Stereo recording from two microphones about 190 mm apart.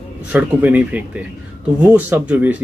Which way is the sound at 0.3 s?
10° right (ahead or behind).